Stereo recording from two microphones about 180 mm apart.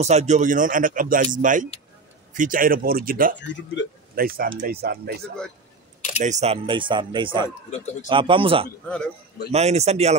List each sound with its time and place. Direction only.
0.0 s speech: 40° right (ahead or behind); by 5.3 s 60° right (ahead or behind)
6.2 s speech: 40° right (ahead or behind)
7.7 s speech: 40° left (ahead or behind)
8.1 s speech: 30° right (ahead or behind)
8.8 s a man's voice: 5° left (ahead or behind)
9.5 s a man's voice: 35° right (ahead or behind)